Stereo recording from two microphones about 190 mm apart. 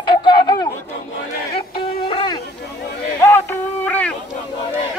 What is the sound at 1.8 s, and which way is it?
Music, 25° left (ahead or behind).